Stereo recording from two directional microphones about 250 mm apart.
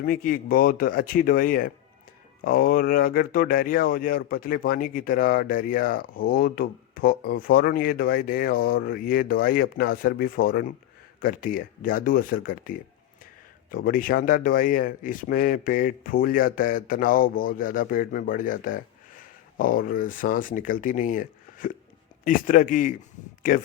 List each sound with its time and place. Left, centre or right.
0.0 s speech: left